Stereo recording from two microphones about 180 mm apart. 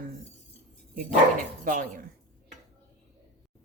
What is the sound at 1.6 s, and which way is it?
Speech, 45° right (ahead or behind).